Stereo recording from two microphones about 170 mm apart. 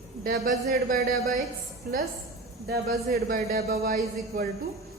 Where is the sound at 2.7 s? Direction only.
60° right (ahead or behind).